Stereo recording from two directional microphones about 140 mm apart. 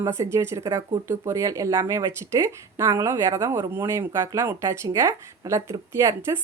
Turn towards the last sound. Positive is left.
turn(degrees=-20)  # may be behind; listen again after turning